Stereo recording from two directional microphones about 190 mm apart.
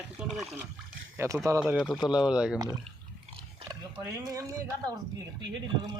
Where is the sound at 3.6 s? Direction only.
15° right (ahead or behind).